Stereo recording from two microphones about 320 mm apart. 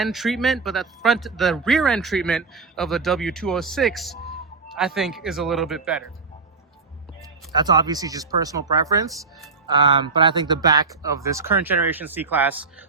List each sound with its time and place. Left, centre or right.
0.0 s speech: centre
7.5 s speech: centre